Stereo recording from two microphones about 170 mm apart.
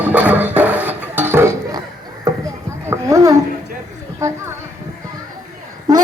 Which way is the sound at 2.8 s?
15° right (ahead or behind).